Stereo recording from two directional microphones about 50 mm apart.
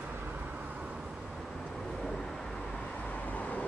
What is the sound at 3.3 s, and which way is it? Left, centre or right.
Vehicle, left.